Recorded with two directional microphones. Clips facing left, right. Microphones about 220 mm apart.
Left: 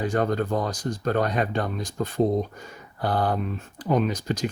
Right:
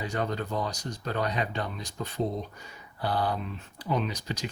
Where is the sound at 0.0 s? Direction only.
50° left (ahead or behind).